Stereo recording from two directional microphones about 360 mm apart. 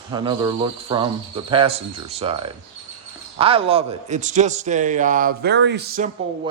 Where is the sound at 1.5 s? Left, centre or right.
Centre.